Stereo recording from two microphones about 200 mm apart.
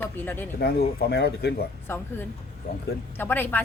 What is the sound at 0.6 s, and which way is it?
Speech, 50° left (ahead or behind).